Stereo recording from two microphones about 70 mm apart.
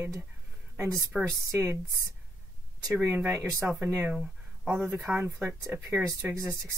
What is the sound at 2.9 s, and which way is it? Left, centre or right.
Speech, right.